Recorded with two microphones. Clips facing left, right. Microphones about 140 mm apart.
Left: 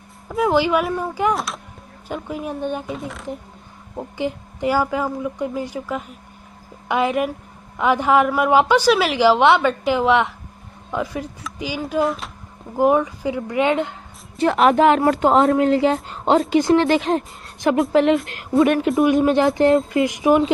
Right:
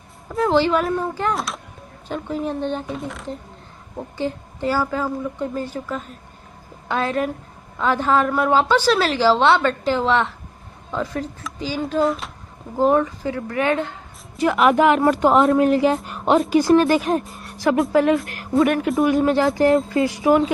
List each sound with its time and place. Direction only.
0.3 s a woman's voice: 10° left (ahead or behind)
2.9 s speech: centre (ahead or behind)
4.2 s a woman's voice: 15° left (ahead or behind)
12.0 s speech: centre (ahead or behind)
12.7 s a woman's voice: 10° left (ahead or behind)
14.4 s speech: 30° left (ahead or behind)